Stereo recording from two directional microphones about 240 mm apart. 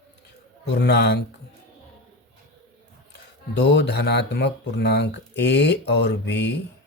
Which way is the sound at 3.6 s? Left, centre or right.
Left.